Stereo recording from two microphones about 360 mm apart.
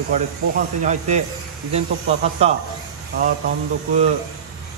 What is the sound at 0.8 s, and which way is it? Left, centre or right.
Speech, centre.